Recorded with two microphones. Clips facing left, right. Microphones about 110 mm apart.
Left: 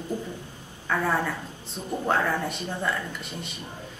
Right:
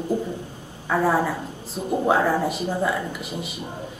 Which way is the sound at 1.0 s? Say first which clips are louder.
Right 6 dB; 25° right (ahead or behind).